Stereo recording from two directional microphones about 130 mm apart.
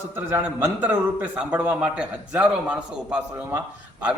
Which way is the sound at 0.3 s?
15° right (ahead or behind).